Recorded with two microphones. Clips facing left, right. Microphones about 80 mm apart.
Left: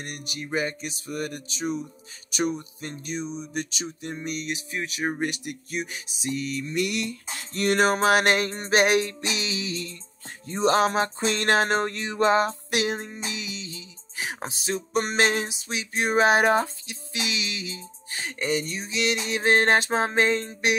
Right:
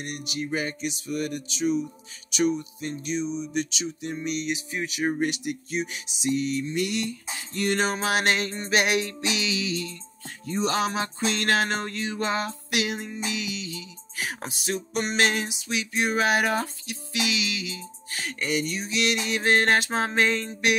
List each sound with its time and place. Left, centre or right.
0.0 s music: left
6.3 s music: right
6.6 s music: left